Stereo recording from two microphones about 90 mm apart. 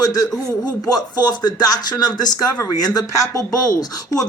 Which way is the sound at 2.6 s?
45° left (ahead or behind).